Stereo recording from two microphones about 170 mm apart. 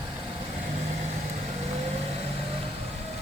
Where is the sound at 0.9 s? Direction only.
40° right (ahead or behind).